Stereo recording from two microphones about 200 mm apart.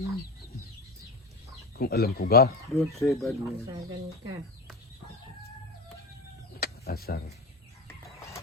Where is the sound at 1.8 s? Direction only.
50° left (ahead or behind).